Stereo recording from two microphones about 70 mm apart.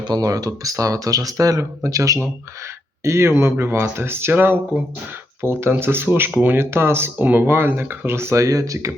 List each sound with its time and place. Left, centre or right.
0.0 s speech: right